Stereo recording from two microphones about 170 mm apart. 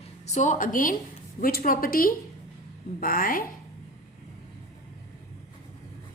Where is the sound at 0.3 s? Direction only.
45° left (ahead or behind).